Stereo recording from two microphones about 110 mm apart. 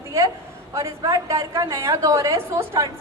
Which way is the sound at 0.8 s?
30° right (ahead or behind).